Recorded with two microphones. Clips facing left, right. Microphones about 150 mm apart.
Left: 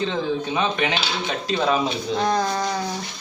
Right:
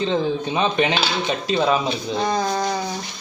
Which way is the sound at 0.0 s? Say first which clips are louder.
Right 3 dB; 25° right (ahead or behind).